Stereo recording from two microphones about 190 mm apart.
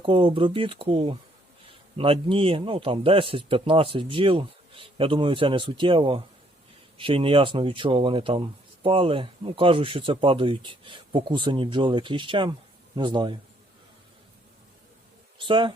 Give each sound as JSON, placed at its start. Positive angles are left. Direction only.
{"t": 0.0, "sound": "speech", "side_deg": -25}
{"t": 15.4, "sound": "speech", "side_deg": -25}